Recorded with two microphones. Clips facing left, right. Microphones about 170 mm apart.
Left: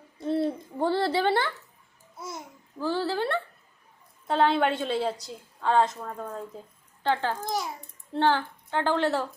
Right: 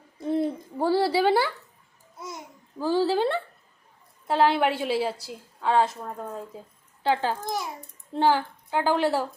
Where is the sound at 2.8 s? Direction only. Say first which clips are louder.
Right 5 dB; 15° right (ahead or behind).